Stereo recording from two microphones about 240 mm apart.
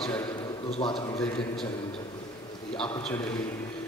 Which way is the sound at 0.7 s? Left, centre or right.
Left.